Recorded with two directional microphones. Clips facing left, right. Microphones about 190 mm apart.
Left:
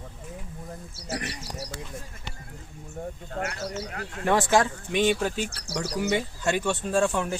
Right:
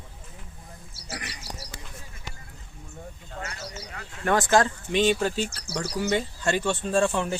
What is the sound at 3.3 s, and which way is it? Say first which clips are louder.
Speech: left 6 dB; 55° left (ahead or behind).